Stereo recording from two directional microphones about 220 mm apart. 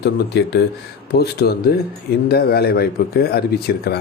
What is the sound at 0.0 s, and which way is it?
Speech, 50° left (ahead or behind).